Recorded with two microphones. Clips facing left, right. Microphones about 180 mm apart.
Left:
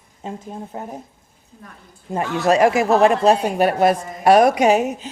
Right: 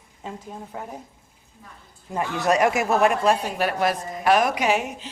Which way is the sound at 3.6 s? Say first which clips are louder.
Left 7 dB; 50° left (ahead or behind).